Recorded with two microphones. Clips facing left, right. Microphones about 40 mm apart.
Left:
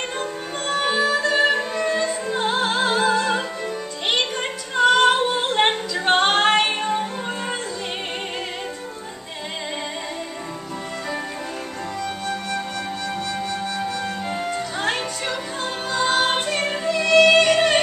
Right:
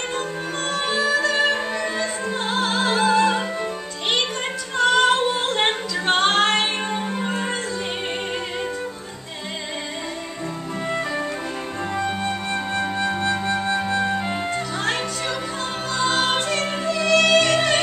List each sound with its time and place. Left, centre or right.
0.7 s music: centre
4.7 s a capella: centre
6.8 s music: centre
12.0 s music: right
15.9 s music: centre